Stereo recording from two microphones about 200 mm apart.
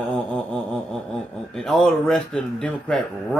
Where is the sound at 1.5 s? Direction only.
Centre (ahead or behind).